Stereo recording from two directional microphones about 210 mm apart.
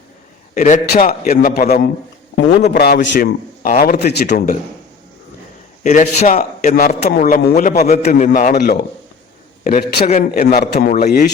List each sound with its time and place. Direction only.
0.5 s a man's voice: 40° left (ahead or behind)
5.8 s a man's voice: 35° left (ahead or behind)